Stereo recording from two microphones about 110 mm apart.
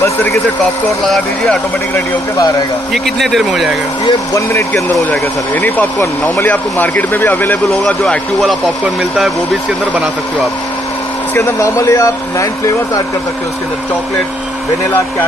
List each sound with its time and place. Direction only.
0.0 s speech: 25° left (ahead or behind)
1.0 s speech: centre (ahead or behind)
2.0 s speech: 30° left (ahead or behind)
2.9 s speech: centre (ahead or behind)
4.0 s speech: 30° left (ahead or behind)
5.5 s speech: 15° left (ahead or behind)
7.8 s speech: 5° left (ahead or behind)
11.3 s speech: 25° left (ahead or behind)